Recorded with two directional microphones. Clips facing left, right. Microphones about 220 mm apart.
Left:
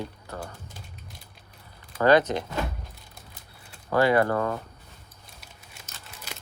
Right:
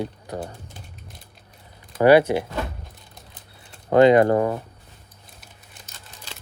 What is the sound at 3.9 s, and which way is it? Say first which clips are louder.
Speech: right 7 dB; 20° right (ahead or behind).